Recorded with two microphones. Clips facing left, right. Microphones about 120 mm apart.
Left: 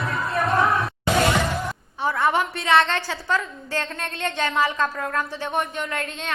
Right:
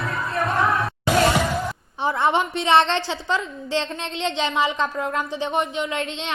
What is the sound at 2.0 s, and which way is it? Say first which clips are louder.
A woman's voice: right 1 dB; 25° right (ahead or behind).